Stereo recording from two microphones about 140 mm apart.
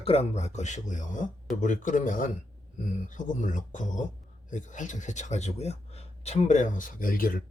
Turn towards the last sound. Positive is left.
turn(degrees=90)